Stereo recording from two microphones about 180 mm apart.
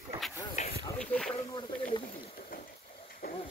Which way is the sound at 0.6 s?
40° left (ahead or behind).